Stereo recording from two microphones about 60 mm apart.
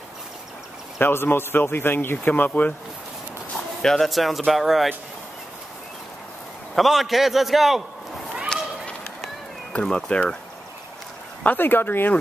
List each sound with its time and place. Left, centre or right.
0.9 s speech: left
3.8 s a man's voice: centre
6.7 s a man's voice: centre
9.7 s speech: centre
11.4 s speech: left